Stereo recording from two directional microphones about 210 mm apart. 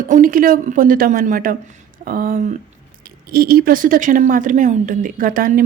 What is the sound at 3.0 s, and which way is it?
Speech, 45° right (ahead or behind).